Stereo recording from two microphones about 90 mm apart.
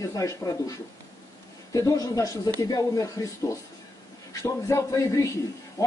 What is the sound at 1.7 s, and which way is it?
Speech, 40° left (ahead or behind).